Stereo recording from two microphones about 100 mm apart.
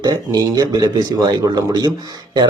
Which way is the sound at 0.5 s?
45° right (ahead or behind).